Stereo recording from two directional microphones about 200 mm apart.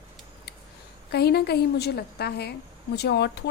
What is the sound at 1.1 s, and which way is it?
A woman's voice, 55° left (ahead or behind).